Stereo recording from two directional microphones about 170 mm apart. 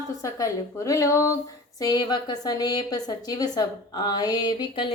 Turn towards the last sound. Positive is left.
turn(degrees=25)  # may be behind; listen again after turning